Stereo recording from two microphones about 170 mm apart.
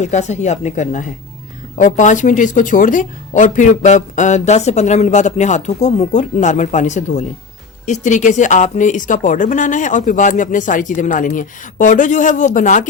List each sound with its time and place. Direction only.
0.0 s speech: 45° left (ahead or behind)